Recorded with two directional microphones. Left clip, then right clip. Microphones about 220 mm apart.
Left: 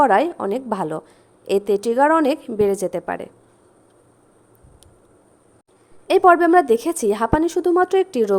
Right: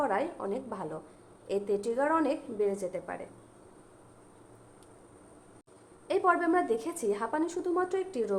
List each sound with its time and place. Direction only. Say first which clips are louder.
0.0 s a woman's voice: left 15 dB; 45° left (ahead or behind)
6.1 s a woman's voice: left 14 dB; 40° left (ahead or behind)